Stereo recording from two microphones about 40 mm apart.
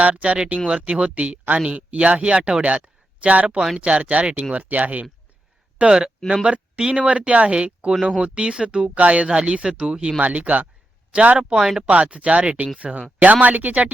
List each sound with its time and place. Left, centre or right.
0.0 s speech: right
5.8 s speech: right
9.0 s speech: right; by 10.2 s centre
10.2 s speech: right
11.1 s speech: right
11.5 s speech: centre
11.8 s speech: right